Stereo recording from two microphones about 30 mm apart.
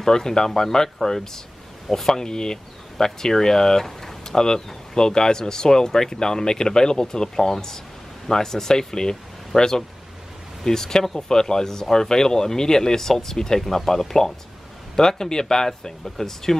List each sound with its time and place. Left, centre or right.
0.0 s speech: centre
2.2 s speech: left
3.8 s a sound: centre
4.4 s speech: left